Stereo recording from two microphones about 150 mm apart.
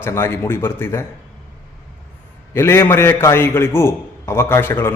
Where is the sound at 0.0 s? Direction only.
15° left (ahead or behind).